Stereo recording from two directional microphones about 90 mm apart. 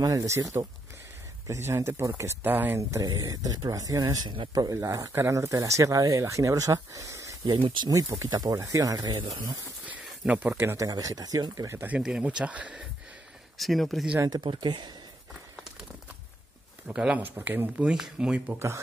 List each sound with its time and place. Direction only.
0.0 s speech: 40° right (ahead or behind); by 2.8 s 20° right (ahead or behind)
2.8 s speech: 35° right (ahead or behind); by 4.4 s 50° right (ahead or behind)
4.6 s speech: 35° right (ahead or behind)
10.2 s speech: 15° right (ahead or behind)
10.8 s speech: 40° right (ahead or behind)
12.0 s speech: 10° right (ahead or behind)
13.6 s speech: centre (ahead or behind)
14.4 s speech: 60° right (ahead or behind)
16.9 s speech: 15° right (ahead or behind)
17.4 s speech: 25° right (ahead or behind)
17.7 s speech: 5° right (ahead or behind)